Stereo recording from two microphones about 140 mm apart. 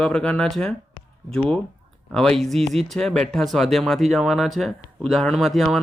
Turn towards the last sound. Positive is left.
turn(degrees=0)  # may be behind; listen again after turning